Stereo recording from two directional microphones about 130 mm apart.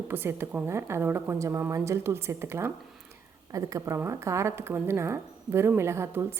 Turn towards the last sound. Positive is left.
turn(degrees=-20)  # may be behind; listen again after turning